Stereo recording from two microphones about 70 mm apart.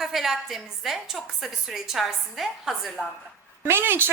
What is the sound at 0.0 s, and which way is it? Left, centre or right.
A woman's voice, centre.